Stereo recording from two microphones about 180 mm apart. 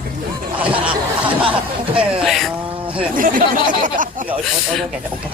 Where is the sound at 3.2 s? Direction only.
50° right (ahead or behind).